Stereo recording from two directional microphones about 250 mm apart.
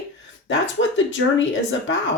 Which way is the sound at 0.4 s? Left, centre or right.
Left.